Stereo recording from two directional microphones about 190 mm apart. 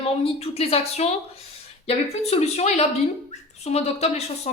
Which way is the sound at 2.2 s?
35° left (ahead or behind).